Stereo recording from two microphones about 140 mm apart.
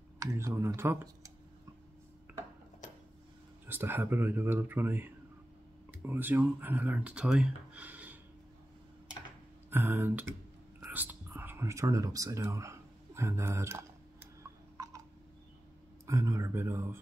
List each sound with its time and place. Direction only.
0.2 s speech: 20° right (ahead or behind)
2.3 s cutlery: 10° right (ahead or behind)
3.6 s speech: 15° right (ahead or behind)
9.7 s speech: 15° right (ahead or behind)
10.8 s whispering: 10° right (ahead or behind)
16.1 s speech: 20° right (ahead or behind)